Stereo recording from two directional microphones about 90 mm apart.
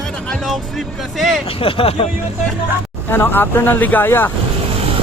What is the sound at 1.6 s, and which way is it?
Speech, 90° left.